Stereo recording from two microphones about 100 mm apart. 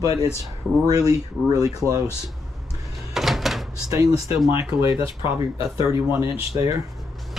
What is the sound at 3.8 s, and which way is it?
Speech, 35° right (ahead or behind).